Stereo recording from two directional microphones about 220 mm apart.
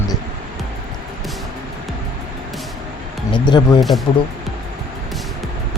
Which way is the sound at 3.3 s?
20° left (ahead or behind).